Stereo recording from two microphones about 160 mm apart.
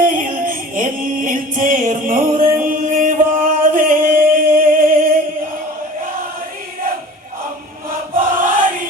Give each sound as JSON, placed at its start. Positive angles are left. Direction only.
{"t": 0.0, "sound": "music", "side_deg": -55}
{"t": 8.1, "sound": "chant", "side_deg": -60}